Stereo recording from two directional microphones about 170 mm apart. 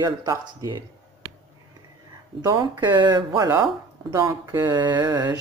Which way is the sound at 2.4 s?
25° right (ahead or behind).